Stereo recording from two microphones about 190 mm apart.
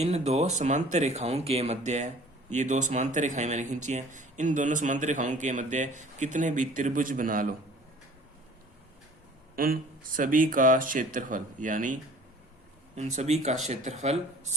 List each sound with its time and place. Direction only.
0.0 s speech: 35° right (ahead or behind)
9.6 s speech: 50° right (ahead or behind)
13.0 s speech: 35° right (ahead or behind)